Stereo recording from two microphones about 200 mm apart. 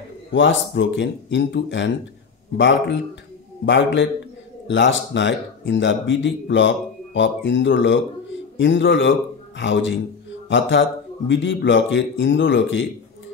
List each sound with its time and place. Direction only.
0.3 s a man's voice: 65° left (ahead or behind)